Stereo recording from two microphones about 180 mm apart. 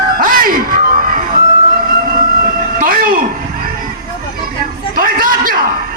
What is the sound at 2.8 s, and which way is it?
Vehicle, 50° right (ahead or behind).